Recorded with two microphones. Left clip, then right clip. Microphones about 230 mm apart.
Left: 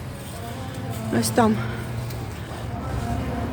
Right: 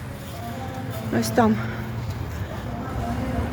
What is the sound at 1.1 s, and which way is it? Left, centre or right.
Speech, centre.